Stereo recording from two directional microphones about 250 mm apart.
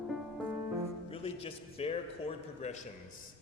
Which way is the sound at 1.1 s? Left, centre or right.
Left.